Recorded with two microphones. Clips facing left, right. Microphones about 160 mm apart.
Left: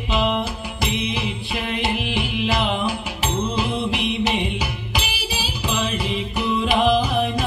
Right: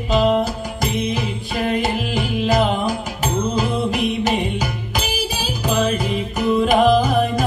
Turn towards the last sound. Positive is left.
turn(degrees=-45)  # may be behind; listen again after turning